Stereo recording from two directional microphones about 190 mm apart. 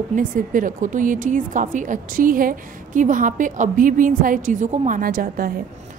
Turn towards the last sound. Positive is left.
turn(degrees=-50)  # may be behind; listen again after turning